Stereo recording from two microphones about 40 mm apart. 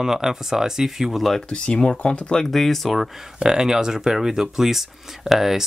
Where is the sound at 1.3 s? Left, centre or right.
Centre.